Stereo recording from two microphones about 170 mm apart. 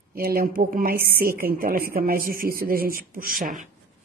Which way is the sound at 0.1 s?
60° right (ahead or behind).